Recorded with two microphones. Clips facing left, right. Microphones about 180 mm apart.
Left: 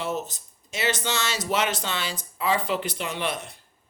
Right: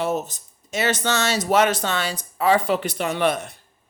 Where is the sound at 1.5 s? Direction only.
50° right (ahead or behind).